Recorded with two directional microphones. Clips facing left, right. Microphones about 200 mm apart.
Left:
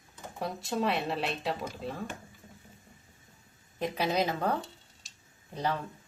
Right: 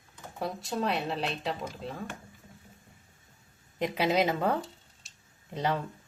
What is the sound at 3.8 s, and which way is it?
Speech, 20° right (ahead or behind).